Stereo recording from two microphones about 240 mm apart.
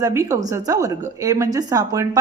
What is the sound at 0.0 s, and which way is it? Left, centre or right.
A woman's voice, centre.